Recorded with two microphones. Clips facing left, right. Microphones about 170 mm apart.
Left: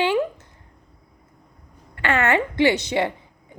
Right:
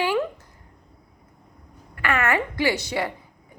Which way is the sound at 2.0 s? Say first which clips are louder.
Left 3 dB; 25° left (ahead or behind).